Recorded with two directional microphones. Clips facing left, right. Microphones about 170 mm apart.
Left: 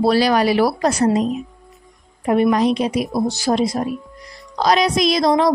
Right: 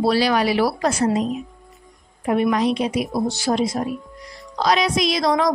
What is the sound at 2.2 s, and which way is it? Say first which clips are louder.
A woman's voice: left 3 dB; 40° left (ahead or behind).